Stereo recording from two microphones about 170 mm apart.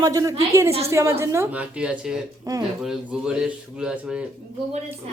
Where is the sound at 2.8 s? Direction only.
5° right (ahead or behind).